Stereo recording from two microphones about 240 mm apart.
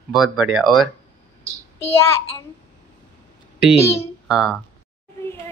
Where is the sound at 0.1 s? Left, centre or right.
Centre.